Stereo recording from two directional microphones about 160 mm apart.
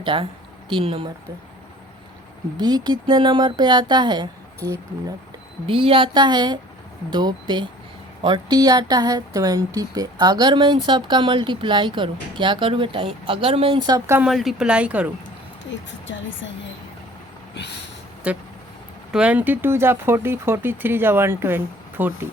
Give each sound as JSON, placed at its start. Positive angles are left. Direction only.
{"t": 0.0, "sound": "speech", "side_deg": -30}
{"t": 2.6, "sound": "a woman's voice", "side_deg": -25}
{"t": 5.6, "sound": "a woman's voice", "side_deg": -35}
{"t": 14.2, "sound": "speech", "side_deg": 0}
{"t": 18.3, "sound": "speech", "side_deg": -10}